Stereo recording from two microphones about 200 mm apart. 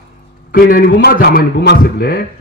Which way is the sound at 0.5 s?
45° left (ahead or behind).